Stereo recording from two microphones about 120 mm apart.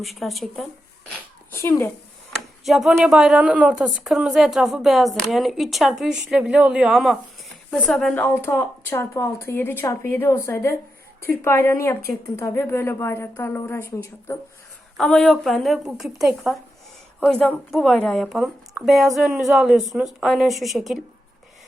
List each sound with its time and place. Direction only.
0.0 s a woman's voice: centre (ahead or behind)
1.5 s speech: 20° left (ahead or behind)
2.6 s a woman's voice: 5° right (ahead or behind)
8.1 s speech: 15° left (ahead or behind)
14.9 s a woman's voice: 5° left (ahead or behind)